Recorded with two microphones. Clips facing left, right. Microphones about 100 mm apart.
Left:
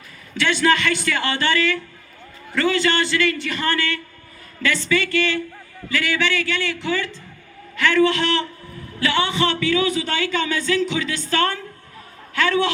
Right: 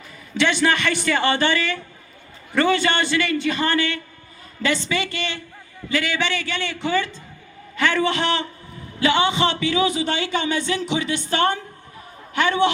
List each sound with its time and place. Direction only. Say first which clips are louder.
0.3 s a man's voice: left 1 dB; 20° right (ahead or behind)